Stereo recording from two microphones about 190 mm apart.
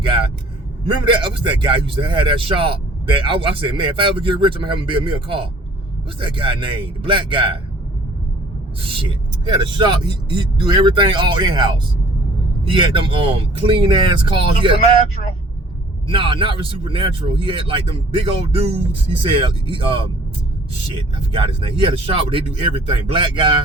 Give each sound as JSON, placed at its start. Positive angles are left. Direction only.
{"t": 0.9, "sound": "speech", "side_deg": -25}
{"t": 9.0, "sound": "speech", "side_deg": -25}
{"t": 10.0, "sound": "speech", "side_deg": 30}
{"t": 10.3, "sound": "speech", "side_deg": -25}
{"t": 16.0, "sound": "speech", "side_deg": -25}